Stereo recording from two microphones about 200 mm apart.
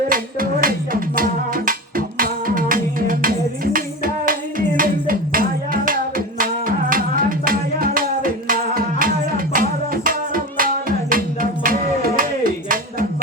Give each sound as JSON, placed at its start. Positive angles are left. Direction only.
{"t": 0.1, "sound": "music", "side_deg": -45}